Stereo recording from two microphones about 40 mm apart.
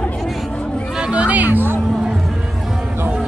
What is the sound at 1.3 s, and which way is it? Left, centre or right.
Music, right.